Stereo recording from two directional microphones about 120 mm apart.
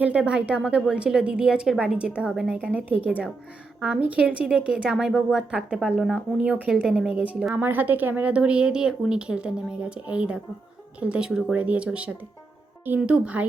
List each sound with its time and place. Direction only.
0.0 s a woman's voice: 10° right (ahead or behind)